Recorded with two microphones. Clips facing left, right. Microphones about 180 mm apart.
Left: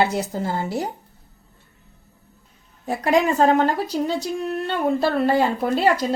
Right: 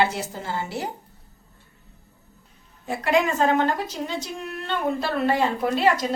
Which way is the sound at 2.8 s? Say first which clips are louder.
Left 3 dB; 40° left (ahead or behind).